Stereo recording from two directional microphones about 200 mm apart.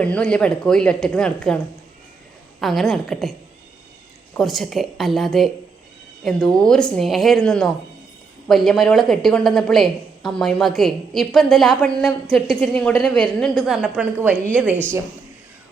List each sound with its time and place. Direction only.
0.0 s a woman's voice: 5° left (ahead or behind)
2.6 s a woman's voice: centre (ahead or behind)
4.4 s a woman's voice: centre (ahead or behind)